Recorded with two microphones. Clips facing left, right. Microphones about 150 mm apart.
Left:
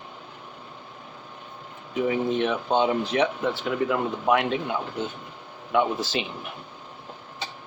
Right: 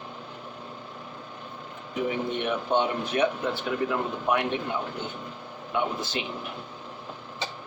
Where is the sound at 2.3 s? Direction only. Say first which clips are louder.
Left 3 dB; 90° left.